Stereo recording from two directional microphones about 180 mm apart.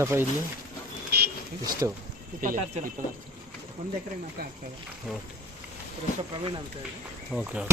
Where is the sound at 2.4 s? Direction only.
45° right (ahead or behind).